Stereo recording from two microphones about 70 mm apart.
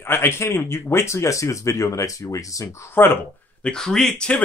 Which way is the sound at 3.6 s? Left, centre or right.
Centre.